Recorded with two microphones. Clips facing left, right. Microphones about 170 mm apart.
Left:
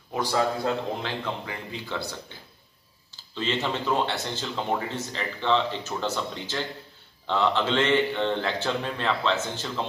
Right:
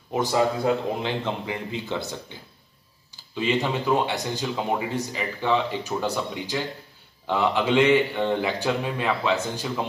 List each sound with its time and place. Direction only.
0.1 s speech: 20° right (ahead or behind)
3.3 s a man's voice: 10° right (ahead or behind)